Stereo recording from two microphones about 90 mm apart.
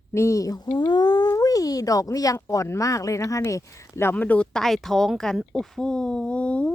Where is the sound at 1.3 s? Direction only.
40° left (ahead or behind).